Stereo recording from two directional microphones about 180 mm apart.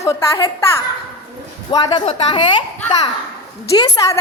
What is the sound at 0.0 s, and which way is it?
Speech, 15° left (ahead or behind).